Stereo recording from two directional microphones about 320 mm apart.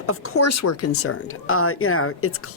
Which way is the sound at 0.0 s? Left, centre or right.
Left.